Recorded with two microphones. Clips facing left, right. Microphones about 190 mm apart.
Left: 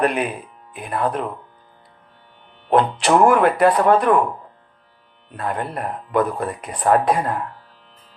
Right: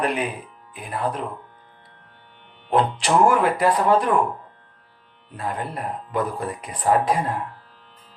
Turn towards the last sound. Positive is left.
turn(degrees=60)  # may be behind; listen again after turning